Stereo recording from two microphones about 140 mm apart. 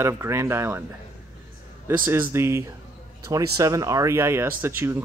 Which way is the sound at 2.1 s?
15° right (ahead or behind).